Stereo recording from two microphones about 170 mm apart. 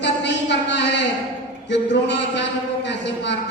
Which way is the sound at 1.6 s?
90° left.